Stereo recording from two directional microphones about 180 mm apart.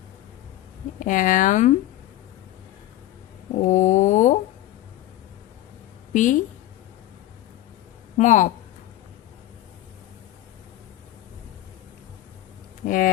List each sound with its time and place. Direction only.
0.9 s speech: 45° left (ahead or behind)
3.6 s speech: 40° left (ahead or behind)
6.1 s speech: 45° left (ahead or behind)
8.2 s speech: 45° left (ahead or behind)
12.8 s speech: 50° left (ahead or behind)